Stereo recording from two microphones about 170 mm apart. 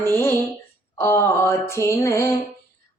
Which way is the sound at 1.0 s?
15° left (ahead or behind).